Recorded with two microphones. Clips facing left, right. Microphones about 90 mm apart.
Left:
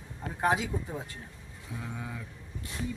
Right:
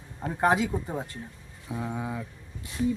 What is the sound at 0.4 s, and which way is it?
Speech, 50° right (ahead or behind).